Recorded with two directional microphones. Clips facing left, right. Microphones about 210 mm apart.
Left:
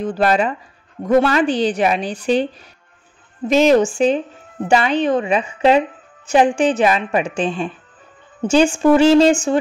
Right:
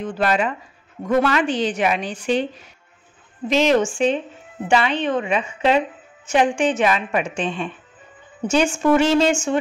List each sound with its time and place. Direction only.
0.0 s a woman's voice: 35° left (ahead or behind)
3.4 s a woman's voice: 45° left (ahead or behind)